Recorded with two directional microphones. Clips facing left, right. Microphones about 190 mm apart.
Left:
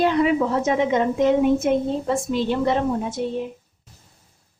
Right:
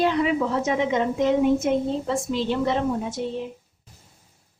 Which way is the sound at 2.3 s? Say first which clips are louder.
Left 2 dB; 50° left (ahead or behind).